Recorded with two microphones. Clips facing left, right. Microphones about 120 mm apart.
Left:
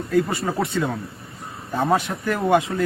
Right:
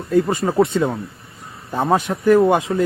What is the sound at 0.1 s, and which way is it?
Speech, 15° right (ahead or behind).